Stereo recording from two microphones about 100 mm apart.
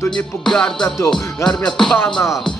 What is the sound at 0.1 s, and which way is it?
Music, 5° left (ahead or behind).